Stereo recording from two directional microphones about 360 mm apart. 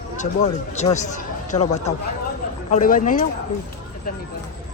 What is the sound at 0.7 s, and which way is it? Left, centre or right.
Speech, centre.